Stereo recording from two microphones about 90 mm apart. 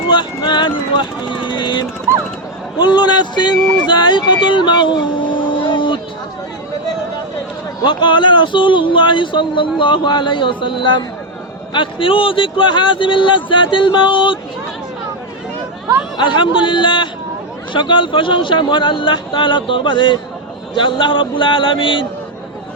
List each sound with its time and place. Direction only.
0.1 s speech: 60° left (ahead or behind)
7.9 s speech: 60° left (ahead or behind)
16.1 s a man's voice: 60° left (ahead or behind)